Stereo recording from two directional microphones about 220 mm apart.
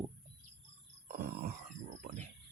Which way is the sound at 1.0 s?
40° right (ahead or behind).